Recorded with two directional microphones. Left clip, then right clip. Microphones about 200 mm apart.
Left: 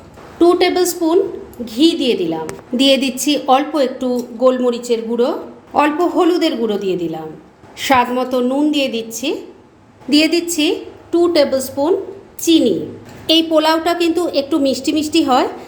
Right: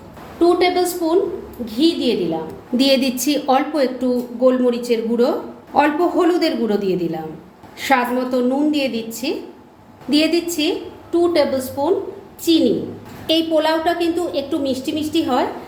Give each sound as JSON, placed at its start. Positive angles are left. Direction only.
{"t": 0.3, "sound": "a woman's voice", "side_deg": 35}
{"t": 2.7, "sound": "a woman's voice", "side_deg": 15}
{"t": 7.8, "sound": "a woman's voice", "side_deg": 25}